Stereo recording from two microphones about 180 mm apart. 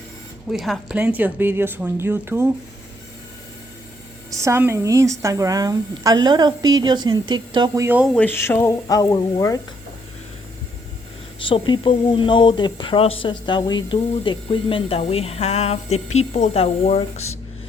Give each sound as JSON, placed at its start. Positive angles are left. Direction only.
{"t": 0.5, "sound": "speech", "side_deg": 0}
{"t": 4.3, "sound": "a woman's voice", "side_deg": -15}
{"t": 8.1, "sound": "speech", "side_deg": 10}
{"t": 11.4, "sound": "speech", "side_deg": 25}